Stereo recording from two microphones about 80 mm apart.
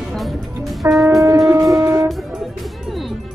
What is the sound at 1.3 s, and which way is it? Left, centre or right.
Music, right.